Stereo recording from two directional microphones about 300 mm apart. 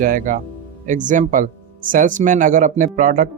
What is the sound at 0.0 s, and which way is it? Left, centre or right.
Speech, right.